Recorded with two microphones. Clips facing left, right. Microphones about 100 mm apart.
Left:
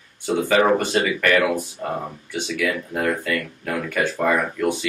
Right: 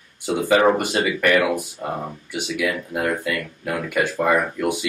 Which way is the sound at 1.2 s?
15° right (ahead or behind).